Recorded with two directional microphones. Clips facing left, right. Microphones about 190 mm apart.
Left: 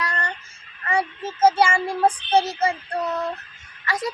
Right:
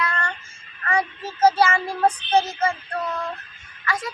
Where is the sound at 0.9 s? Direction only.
25° left (ahead or behind).